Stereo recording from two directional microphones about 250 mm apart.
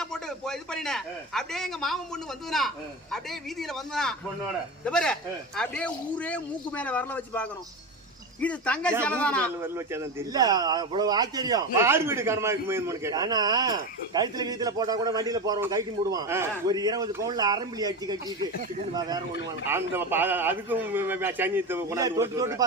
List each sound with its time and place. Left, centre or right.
0.0 s a man's voice: centre
9.7 s speech: centre